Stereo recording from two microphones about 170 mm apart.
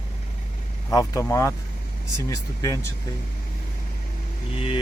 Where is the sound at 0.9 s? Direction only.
20° left (ahead or behind).